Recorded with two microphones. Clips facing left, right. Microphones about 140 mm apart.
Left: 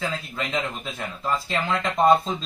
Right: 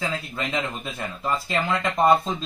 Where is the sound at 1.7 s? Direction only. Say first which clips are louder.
Left 1 dB; centre (ahead or behind).